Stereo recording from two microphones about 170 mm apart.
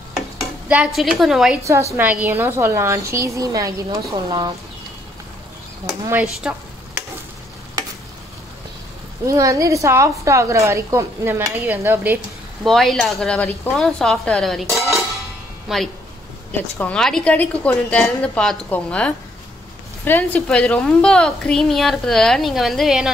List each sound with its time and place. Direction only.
0.4 s speech: 10° right (ahead or behind)
1.6 s a woman's voice: 15° right (ahead or behind)
5.9 s a woman's voice: 15° right (ahead or behind)
9.2 s a woman's voice: 20° right (ahead or behind)
12.6 s a woman's voice: centre (ahead or behind)